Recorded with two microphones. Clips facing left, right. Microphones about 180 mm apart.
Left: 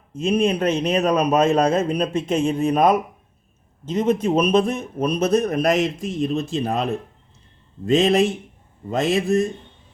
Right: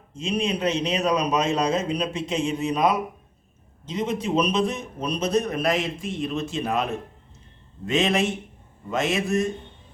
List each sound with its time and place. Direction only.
0.3 s a man's voice: 50° left (ahead or behind)
7.9 s a man's voice: 35° left (ahead or behind)